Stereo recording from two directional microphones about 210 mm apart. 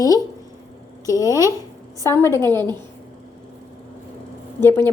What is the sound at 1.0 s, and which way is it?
A woman's voice, 15° left (ahead or behind).